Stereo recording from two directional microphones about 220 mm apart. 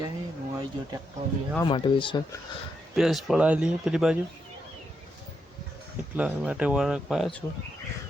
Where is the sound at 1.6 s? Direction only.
20° left (ahead or behind).